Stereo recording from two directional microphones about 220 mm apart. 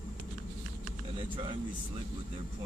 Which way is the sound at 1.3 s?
25° right (ahead or behind).